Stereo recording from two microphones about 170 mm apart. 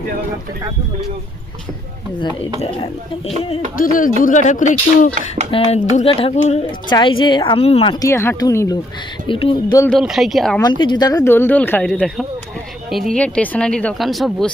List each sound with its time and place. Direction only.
2.6 s speech: 30° left (ahead or behind)
3.8 s speech: 55° left (ahead or behind)
5.5 s speech: 35° left (ahead or behind)
8.0 s speech: 15° left (ahead or behind)
9.2 s speech: 30° left (ahead or behind)
9.9 s speech: centre (ahead or behind)
10.6 s speech: 25° left (ahead or behind); by 14.5 s centre (ahead or behind)